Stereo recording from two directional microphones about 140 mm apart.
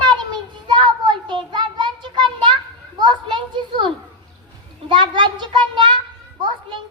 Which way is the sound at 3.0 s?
35° right (ahead or behind).